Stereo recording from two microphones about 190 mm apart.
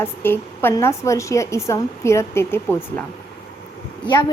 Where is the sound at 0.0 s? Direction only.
10° left (ahead or behind).